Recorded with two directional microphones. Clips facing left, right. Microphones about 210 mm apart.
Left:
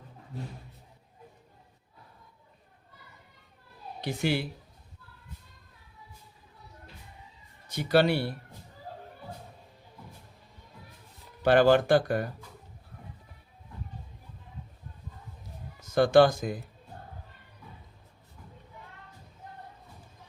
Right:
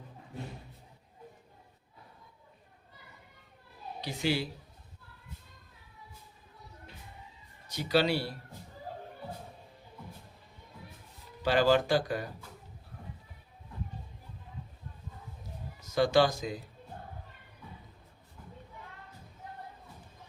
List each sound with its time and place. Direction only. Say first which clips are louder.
4.0 s speech: left 2 dB; 55° left (ahead or behind)
7.7 s speech: left 4 dB; 55° left (ahead or behind)
11.4 s speech: left 5 dB; 55° left (ahead or behind)
15.8 s speech: left 5 dB; 55° left (ahead or behind)